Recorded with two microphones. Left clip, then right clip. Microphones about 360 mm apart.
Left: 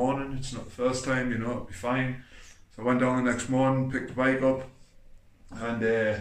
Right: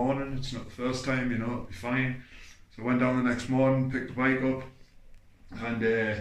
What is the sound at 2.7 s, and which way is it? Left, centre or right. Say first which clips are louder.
Speech: left 2 dB; centre.